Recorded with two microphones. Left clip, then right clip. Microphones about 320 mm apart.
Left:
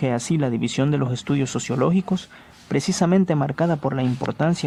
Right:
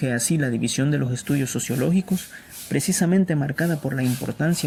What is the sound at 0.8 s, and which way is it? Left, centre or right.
Speech, left.